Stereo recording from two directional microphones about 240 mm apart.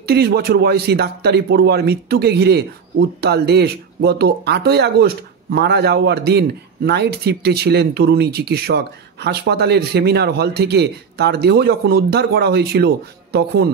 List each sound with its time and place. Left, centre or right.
0.0 s a man's voice: right